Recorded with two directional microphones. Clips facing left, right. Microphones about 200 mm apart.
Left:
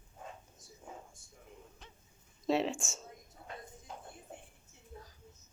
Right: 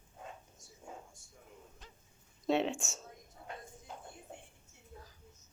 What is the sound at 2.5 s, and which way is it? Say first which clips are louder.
Speech: even; centre (ahead or behind).